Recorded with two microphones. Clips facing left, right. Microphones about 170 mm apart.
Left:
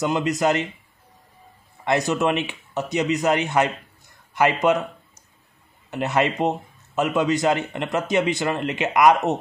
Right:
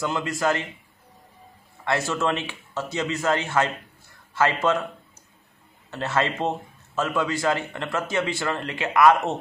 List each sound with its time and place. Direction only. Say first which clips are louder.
0.0 s speech: left 4 dB; 20° left (ahead or behind)
1.9 s a man's voice: left 4 dB; 15° left (ahead or behind)
5.9 s a man's voice: left 3 dB; 15° left (ahead or behind)